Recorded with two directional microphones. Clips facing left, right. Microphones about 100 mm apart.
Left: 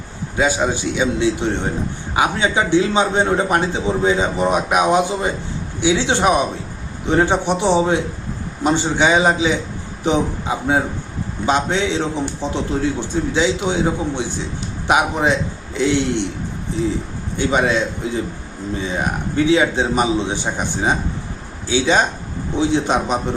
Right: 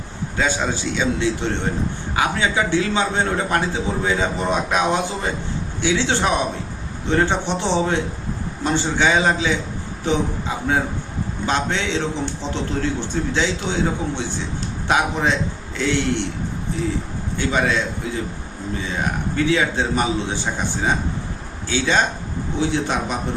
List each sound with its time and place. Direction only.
0.3 s a man's voice: 15° left (ahead or behind)
17.3 s a man's voice: 20° left (ahead or behind)
19.5 s a man's voice: 20° left (ahead or behind)